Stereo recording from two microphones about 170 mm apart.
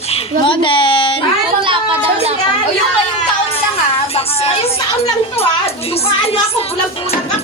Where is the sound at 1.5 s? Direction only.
30° right (ahead or behind).